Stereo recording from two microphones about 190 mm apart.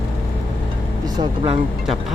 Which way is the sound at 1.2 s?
25° right (ahead or behind).